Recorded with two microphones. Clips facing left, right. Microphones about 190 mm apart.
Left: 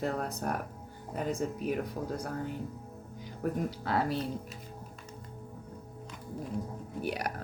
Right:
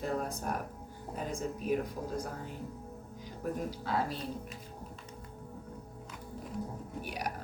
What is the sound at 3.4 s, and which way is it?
Speech, 60° left (ahead or behind).